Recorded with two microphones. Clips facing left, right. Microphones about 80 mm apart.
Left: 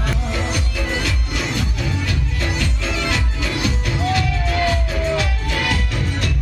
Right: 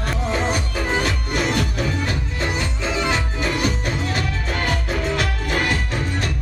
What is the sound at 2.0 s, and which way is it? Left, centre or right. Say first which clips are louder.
Music: even; right.